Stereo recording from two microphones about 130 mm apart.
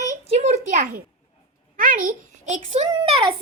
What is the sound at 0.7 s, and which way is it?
A child's voice, 90° right.